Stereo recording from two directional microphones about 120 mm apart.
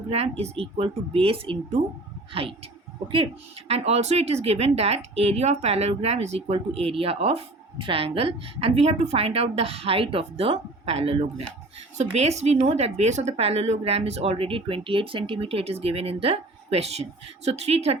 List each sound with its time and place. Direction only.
0.1 s a woman's voice: 55° right (ahead or behind)
3.7 s speech: 60° right (ahead or behind)